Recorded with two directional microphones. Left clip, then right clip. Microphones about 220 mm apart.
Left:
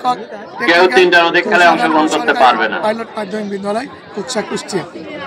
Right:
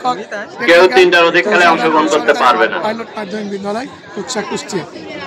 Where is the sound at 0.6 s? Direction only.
30° left (ahead or behind).